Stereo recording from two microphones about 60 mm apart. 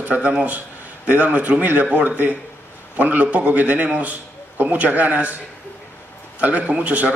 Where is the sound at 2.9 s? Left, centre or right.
Right.